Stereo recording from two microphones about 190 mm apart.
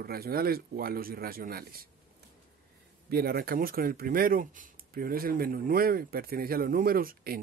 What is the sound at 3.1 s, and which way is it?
Speech, 55° right (ahead or behind).